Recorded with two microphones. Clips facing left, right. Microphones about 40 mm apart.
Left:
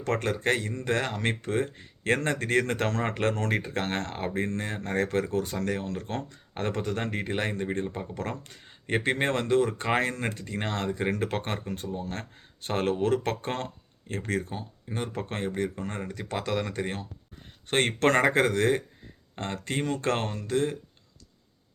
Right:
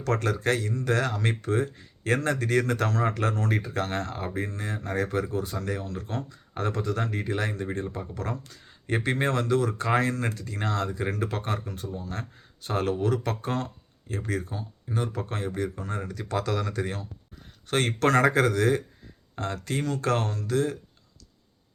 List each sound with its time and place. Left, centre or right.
0.0 s speech: left